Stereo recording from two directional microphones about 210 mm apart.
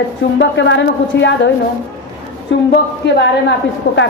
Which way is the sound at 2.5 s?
60° left (ahead or behind).